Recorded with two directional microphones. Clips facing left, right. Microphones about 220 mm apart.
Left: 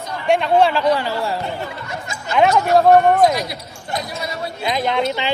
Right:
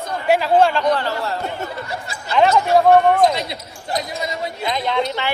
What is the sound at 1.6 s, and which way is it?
Speech, 35° right (ahead or behind).